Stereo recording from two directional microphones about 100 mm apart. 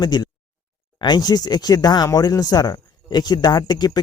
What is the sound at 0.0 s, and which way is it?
Speech, 45° left (ahead or behind).